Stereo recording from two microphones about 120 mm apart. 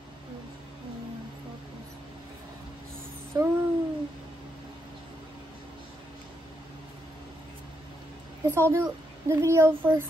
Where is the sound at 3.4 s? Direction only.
30° right (ahead or behind).